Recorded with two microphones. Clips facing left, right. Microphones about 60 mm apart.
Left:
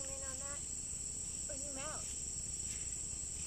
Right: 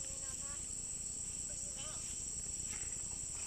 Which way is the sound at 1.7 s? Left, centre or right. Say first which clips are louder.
Left 7 dB; left.